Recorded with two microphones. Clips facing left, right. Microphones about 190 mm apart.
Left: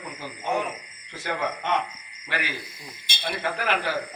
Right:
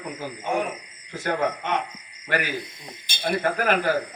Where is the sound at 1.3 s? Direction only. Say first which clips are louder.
Right 3 dB; 50° right (ahead or behind).